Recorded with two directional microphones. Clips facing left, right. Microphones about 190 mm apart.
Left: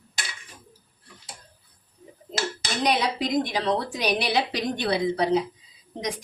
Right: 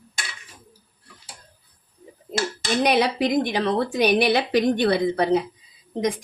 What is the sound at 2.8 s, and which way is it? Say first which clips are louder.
A woman's voice: right 3 dB; 60° right (ahead or behind).